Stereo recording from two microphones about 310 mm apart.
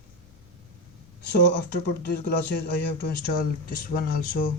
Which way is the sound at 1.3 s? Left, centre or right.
Left.